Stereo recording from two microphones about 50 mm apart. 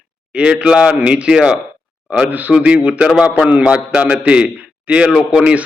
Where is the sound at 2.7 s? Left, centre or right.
Right.